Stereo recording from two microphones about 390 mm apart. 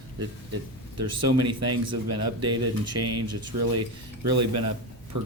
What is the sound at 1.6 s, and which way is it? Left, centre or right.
Speech, right.